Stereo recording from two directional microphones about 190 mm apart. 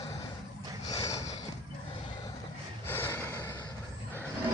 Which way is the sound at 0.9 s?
20° left (ahead or behind).